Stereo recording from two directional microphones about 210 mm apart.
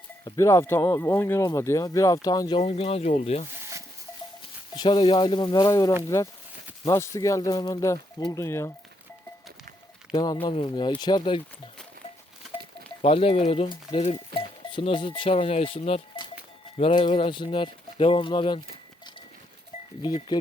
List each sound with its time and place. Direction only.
0.3 s speech: 15° left (ahead or behind); by 3.4 s 30° left (ahead or behind)
4.7 s speech: 20° left (ahead or behind)
10.4 s speech: 25° left (ahead or behind)
12.5 s speech: 25° left (ahead or behind)
20.0 s speech: 25° left (ahead or behind)